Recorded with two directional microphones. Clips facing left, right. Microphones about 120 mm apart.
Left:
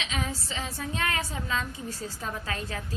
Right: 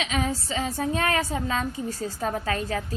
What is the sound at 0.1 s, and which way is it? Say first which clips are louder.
A woman's voice: right 6 dB; 40° right (ahead or behind).